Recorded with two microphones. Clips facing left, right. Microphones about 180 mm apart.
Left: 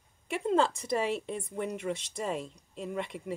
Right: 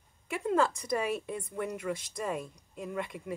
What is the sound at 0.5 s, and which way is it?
Speech, 25° left (ahead or behind).